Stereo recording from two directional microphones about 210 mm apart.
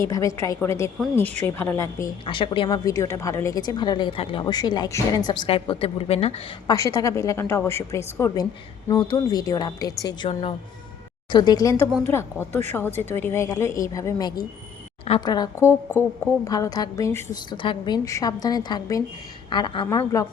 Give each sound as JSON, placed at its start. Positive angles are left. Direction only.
{"t": 0.0, "sound": "a woman's voice", "side_deg": 15}
{"t": 6.7, "sound": "a woman's voice", "side_deg": 15}
{"t": 11.3, "sound": "a woman's voice", "side_deg": 20}
{"t": 17.6, "sound": "a woman's voice", "side_deg": 20}